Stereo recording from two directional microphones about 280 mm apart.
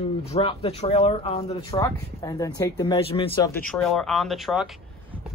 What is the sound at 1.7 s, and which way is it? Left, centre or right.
Speech, centre.